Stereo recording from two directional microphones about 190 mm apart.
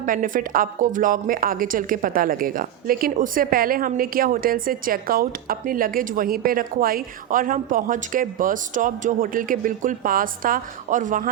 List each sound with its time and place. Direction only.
0.0 s a woman's voice: 45° right (ahead or behind)